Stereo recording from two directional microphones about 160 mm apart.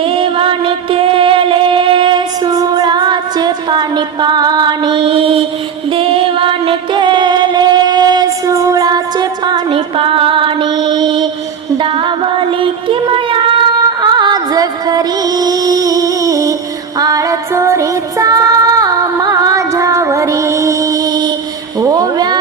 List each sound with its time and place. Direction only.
0.0 s music: 35° right (ahead or behind)
17.0 s female singing: 20° right (ahead or behind)
21.8 s a sound: 25° right (ahead or behind)